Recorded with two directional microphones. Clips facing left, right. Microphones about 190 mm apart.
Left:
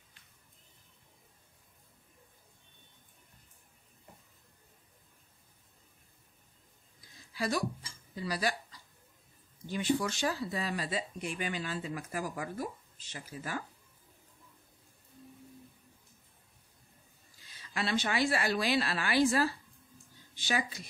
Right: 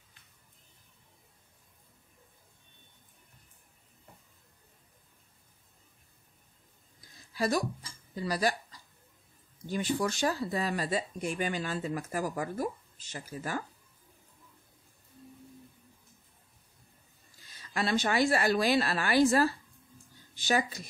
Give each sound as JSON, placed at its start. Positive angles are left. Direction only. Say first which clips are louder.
{"t": 7.3, "sound": "speech", "louder": "right 3 dB", "side_deg": -45}
{"t": 9.7, "sound": "speech", "louder": "right 1 dB", "side_deg": -45}
{"t": 17.5, "sound": "speech", "louder": "right 3 dB", "side_deg": -45}